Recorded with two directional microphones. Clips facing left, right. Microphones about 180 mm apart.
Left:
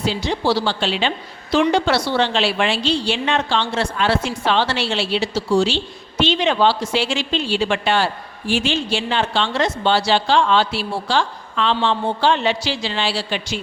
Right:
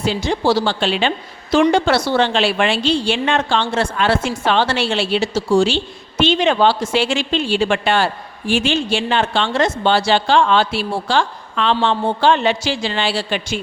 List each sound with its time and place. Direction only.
0.0 s a woman's voice: 50° right (ahead or behind)